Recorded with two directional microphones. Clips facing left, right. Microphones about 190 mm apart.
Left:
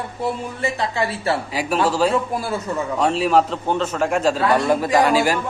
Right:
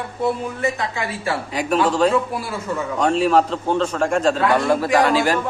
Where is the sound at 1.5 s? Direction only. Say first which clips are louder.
Right 3 dB; 5° left (ahead or behind).